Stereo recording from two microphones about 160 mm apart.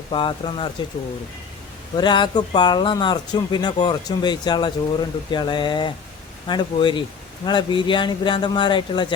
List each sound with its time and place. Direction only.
0.1 s a man's voice: 35° left (ahead or behind)
2.0 s a man's voice: 30° left (ahead or behind)